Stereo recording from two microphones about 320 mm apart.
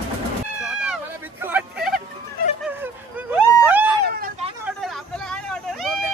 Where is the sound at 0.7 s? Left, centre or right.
Centre.